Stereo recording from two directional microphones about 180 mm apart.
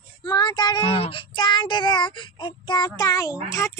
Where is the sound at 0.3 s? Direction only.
25° left (ahead or behind).